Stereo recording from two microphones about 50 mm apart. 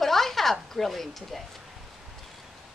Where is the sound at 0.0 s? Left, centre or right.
Centre.